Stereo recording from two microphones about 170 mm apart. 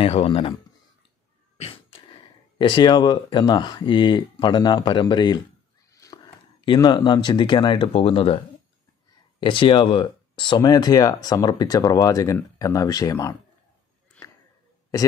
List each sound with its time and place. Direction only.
0.0 s speech: 35° left (ahead or behind)
1.6 s a sound: 35° left (ahead or behind)
2.6 s speech: 25° left (ahead or behind)
6.0 s whispering: 20° left (ahead or behind)
6.6 s speech: 25° left (ahead or behind)
9.4 s speech: 30° left (ahead or behind)
14.2 s a sound: 5° left (ahead or behind)